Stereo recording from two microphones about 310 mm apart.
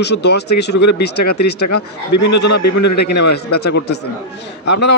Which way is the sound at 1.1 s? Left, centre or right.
Left.